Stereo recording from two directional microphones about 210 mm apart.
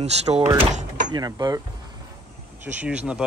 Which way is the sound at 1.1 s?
20° right (ahead or behind).